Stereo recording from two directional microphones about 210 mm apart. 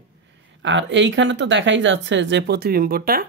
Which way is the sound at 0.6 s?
60° right (ahead or behind).